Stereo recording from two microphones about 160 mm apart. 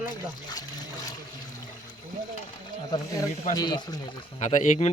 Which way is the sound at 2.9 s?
20° left (ahead or behind).